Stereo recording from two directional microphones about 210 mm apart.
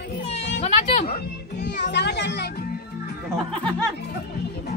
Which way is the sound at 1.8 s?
55° left (ahead or behind).